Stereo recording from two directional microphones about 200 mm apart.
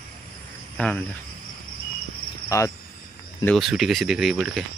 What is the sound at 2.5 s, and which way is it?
Speech, 15° left (ahead or behind).